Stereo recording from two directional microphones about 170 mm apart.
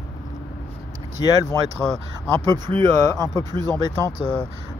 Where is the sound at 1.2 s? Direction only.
25° left (ahead or behind).